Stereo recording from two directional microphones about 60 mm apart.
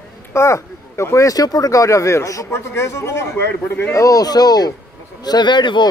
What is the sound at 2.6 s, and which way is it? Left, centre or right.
Speech, left.